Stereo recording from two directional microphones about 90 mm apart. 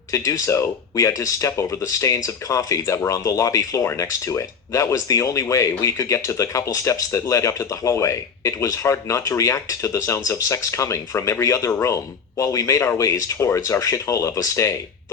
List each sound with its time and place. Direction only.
0.1 s speech: 40° left (ahead or behind)